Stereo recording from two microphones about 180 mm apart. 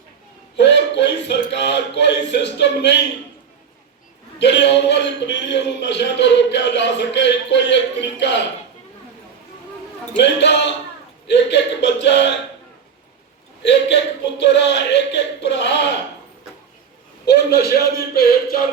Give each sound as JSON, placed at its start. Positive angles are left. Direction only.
{"t": 0.5, "sound": "a man's voice", "side_deg": 75}
{"t": 4.4, "sound": "a man's voice", "side_deg": 75}
{"t": 10.2, "sound": "a man's voice", "side_deg": 75}
{"t": 13.6, "sound": "a man's voice", "side_deg": 75}
{"t": 17.2, "sound": "speech", "side_deg": 65}